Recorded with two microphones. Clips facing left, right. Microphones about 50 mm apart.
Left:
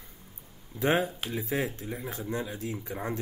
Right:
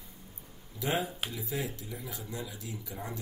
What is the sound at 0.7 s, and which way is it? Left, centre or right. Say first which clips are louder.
Speech: left 6 dB; left.